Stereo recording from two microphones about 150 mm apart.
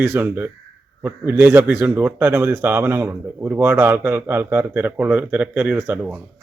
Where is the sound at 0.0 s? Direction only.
15° right (ahead or behind).